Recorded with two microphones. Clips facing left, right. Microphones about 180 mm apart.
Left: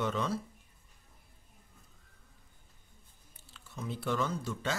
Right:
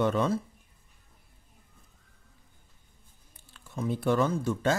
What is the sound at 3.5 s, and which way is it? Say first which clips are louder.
Speech: right 9 dB; 50° right (ahead or behind).